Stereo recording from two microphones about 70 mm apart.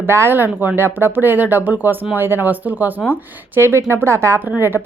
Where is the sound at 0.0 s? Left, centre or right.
Right.